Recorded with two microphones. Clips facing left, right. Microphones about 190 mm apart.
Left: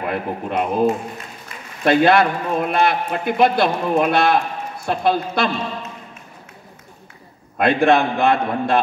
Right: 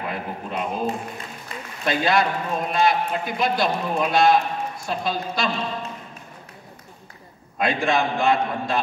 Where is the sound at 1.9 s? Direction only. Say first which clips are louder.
Left 7 dB; 60° left (ahead or behind).